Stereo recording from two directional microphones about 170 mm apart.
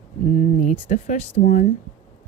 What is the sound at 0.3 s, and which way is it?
Speech, 50° left (ahead or behind).